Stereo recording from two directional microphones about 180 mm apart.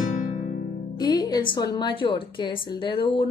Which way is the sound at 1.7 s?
25° left (ahead or behind).